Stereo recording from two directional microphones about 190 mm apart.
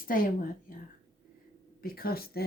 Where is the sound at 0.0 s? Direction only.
50° left (ahead or behind).